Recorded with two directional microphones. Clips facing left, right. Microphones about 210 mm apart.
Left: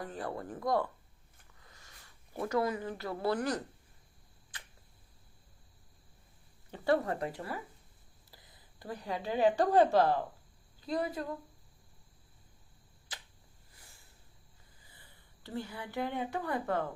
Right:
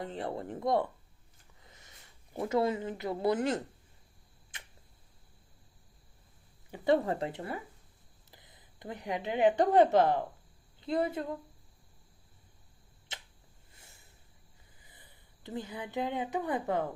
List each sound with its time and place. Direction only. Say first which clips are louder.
0.0 s speech: right 2 dB; 25° right (ahead or behind)
4.5 s tick-tock: even; 25° right (ahead or behind)
6.8 s a woman's voice: right 2 dB; 25° right (ahead or behind)
13.1 s a sound: right 2 dB; 25° right (ahead or behind)
14.8 s speech: right 1 dB; 15° right (ahead or behind)